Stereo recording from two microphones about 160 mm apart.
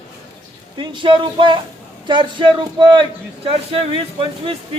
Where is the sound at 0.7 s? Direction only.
30° right (ahead or behind).